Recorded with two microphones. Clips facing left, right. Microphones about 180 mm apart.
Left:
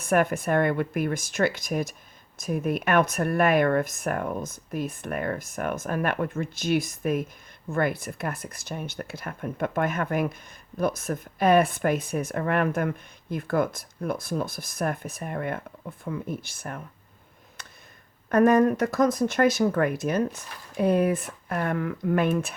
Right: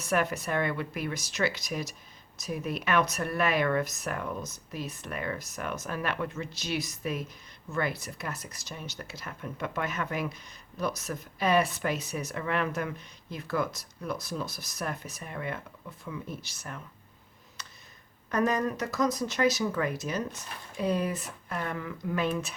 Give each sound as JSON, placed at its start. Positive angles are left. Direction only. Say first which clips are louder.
{"t": 0.0, "sound": "speech", "louder": "left 6 dB", "side_deg": 50}
{"t": 17.6, "sound": "a sound", "louder": "even", "side_deg": 55}
{"t": 18.3, "sound": "speech", "louder": "left 9 dB", "side_deg": 55}